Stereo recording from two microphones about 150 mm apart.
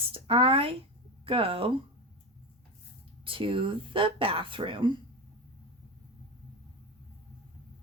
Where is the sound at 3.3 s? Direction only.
35° right (ahead or behind).